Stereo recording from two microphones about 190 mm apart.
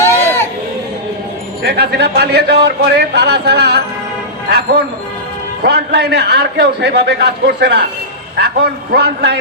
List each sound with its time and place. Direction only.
0.0 s music: 10° left (ahead or behind)
1.6 s a man's voice: 60° right (ahead or behind)
5.6 s a man's voice: 60° right (ahead or behind)